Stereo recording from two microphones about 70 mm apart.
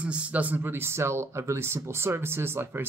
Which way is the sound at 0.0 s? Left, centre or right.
Centre.